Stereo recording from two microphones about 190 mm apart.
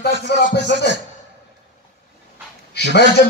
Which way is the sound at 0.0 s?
60° left (ahead or behind).